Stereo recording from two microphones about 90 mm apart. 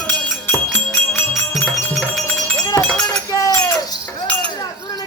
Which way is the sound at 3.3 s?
40° left (ahead or behind).